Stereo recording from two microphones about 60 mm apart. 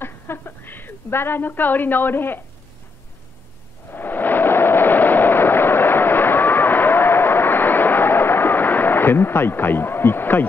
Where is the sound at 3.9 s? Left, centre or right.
Left.